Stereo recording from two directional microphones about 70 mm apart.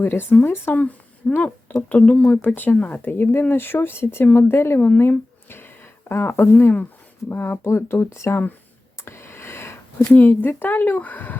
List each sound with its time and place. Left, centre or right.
0.0 s speech: left
1.4 s speech: left
9.0 s a sound: left
10.1 s speech: left